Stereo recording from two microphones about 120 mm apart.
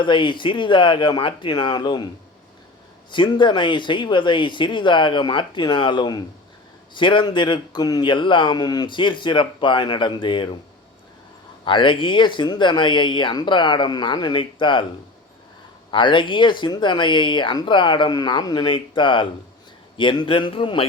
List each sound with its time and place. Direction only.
0.0 s a man's voice: 40° left (ahead or behind)
3.1 s a man's voice: 40° left (ahead or behind)
11.6 s a man's voice: 45° left (ahead or behind)
15.9 s a man's voice: 45° left (ahead or behind)